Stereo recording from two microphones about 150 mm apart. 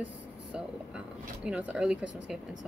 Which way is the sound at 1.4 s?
10° right (ahead or behind).